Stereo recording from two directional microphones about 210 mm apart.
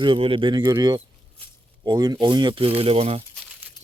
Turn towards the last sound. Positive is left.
turn(degrees=5)  # may be behind; listen again after turning